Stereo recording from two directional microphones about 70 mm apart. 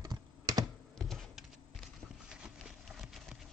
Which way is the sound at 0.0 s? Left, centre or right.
Right.